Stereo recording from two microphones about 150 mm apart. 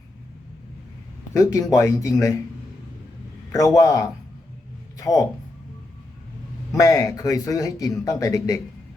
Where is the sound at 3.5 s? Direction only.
20° left (ahead or behind).